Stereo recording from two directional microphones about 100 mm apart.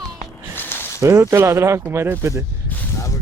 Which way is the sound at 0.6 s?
20° left (ahead or behind).